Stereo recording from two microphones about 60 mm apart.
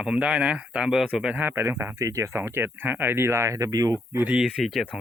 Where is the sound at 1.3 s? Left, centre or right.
Right.